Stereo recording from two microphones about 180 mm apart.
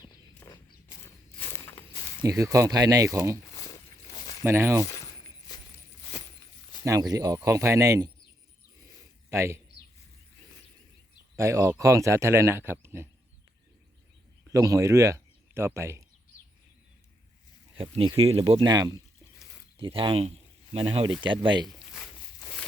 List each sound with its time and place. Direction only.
0.3 s walk: 15° left (ahead or behind)
2.2 s speech: 20° right (ahead or behind)
3.4 s a sound: 20° left (ahead or behind)
4.4 s speech: 15° right (ahead or behind)
6.8 s speech: 20° right (ahead or behind)
9.3 s a man's voice: 15° right (ahead or behind)
11.3 s speech: 15° right (ahead or behind)
14.5 s speech: 20° right (ahead or behind)
17.7 s speech: 30° right (ahead or behind)